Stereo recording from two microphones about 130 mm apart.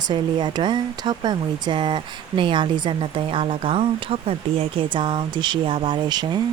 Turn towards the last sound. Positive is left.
turn(degrees=-35)  # may be behind; listen again after turning